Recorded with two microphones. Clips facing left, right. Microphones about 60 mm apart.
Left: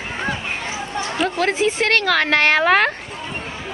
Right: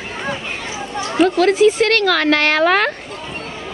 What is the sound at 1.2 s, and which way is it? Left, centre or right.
Speech, left.